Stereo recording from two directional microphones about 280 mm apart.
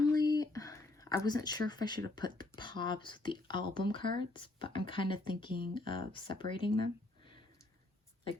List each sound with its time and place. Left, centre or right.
0.2 s speech: centre